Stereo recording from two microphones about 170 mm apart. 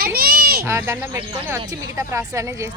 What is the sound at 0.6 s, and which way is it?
A woman's voice, 15° right (ahead or behind).